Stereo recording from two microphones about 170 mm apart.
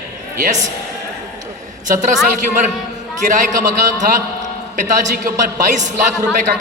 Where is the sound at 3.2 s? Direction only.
45° right (ahead or behind).